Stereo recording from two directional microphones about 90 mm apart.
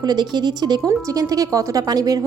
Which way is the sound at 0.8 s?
40° right (ahead or behind).